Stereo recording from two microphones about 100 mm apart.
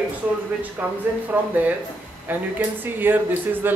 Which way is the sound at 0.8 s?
15° right (ahead or behind).